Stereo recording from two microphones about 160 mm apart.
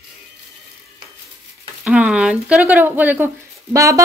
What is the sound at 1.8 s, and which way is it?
A woman's voice, 5° right (ahead or behind).